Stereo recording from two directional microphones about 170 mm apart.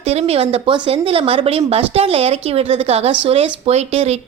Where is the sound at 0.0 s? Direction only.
40° right (ahead or behind).